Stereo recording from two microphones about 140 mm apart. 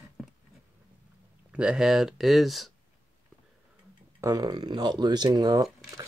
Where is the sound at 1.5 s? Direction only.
5° right (ahead or behind).